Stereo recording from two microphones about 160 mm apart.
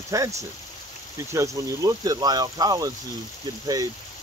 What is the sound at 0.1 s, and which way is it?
Speech, 20° right (ahead or behind).